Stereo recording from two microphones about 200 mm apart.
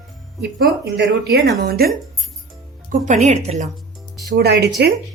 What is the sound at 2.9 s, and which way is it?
Speech, 40° right (ahead or behind).